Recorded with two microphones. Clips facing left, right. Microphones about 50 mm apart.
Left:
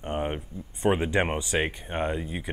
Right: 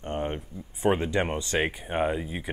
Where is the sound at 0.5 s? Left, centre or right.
Centre.